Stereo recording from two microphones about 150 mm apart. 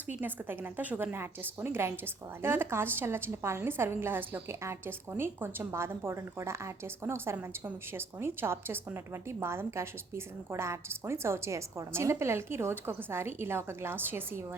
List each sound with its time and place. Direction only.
0.1 s a woman's voice: 10° right (ahead or behind)